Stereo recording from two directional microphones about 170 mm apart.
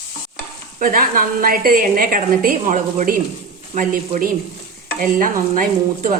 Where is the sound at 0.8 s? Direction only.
55° right (ahead or behind).